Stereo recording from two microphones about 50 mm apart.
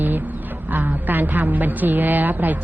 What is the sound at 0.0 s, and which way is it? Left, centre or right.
A woman's voice, right.